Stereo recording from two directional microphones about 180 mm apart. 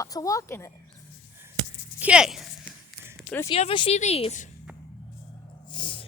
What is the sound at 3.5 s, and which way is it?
Speech, 30° left (ahead or behind).